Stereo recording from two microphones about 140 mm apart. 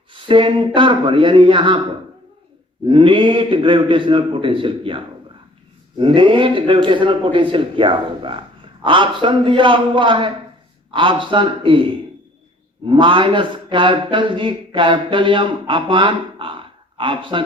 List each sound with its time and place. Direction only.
0.1 s speech: 40° right (ahead or behind)
2.8 s speech: 40° right (ahead or behind)